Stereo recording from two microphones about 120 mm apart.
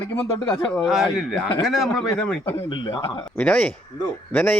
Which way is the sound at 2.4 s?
45° left (ahead or behind).